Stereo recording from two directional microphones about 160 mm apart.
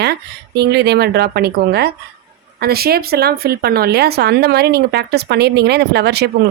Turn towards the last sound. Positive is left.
turn(degrees=-90)